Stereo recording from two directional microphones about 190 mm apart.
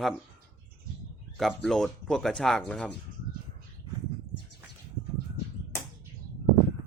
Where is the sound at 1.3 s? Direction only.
Centre (ahead or behind).